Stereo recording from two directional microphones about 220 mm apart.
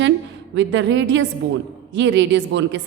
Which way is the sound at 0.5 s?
55° right (ahead or behind).